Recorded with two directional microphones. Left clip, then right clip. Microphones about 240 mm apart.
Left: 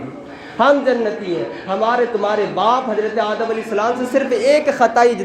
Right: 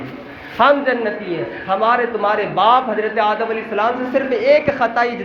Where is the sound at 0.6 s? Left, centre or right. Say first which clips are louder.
Even; left.